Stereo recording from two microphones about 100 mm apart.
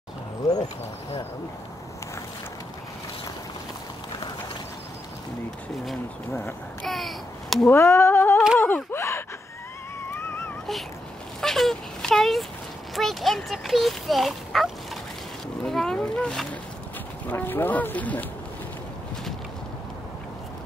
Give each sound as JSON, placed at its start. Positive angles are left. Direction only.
{"t": 6.8, "sound": "a child's voice", "side_deg": 0}
{"t": 7.6, "sound": "a sound", "side_deg": 25}
{"t": 8.5, "sound": "gasp", "side_deg": 20}
{"t": 10.1, "sound": "wail", "side_deg": 25}
{"t": 11.4, "sound": "speech", "side_deg": 0}
{"t": 17.3, "sound": "speech", "side_deg": 20}